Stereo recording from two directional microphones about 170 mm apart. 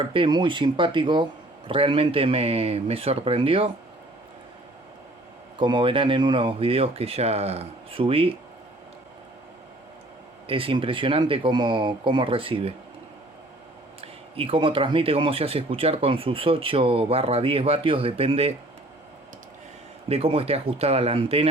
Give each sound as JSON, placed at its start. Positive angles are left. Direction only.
{"t": 0.1, "sound": "speech", "side_deg": -30}
{"t": 5.5, "sound": "speech", "side_deg": -30}
{"t": 10.4, "sound": "speech", "side_deg": -30}
{"t": 14.0, "sound": "speech", "side_deg": -35}
{"t": 20.1, "sound": "speech", "side_deg": -35}